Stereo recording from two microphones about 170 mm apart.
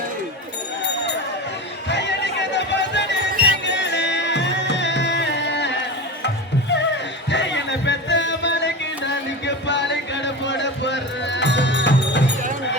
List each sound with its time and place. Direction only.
1.9 s music: 90° left
3.3 s music: 55° right (ahead or behind)
3.7 s music: 90° left